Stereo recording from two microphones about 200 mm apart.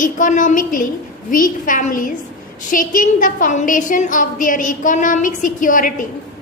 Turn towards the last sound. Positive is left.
turn(degrees=40)  # may be behind; listen again after turning